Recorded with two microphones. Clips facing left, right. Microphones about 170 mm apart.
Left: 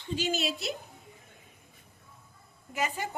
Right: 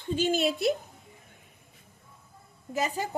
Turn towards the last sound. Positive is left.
turn(degrees=-40)  # may be behind; listen again after turning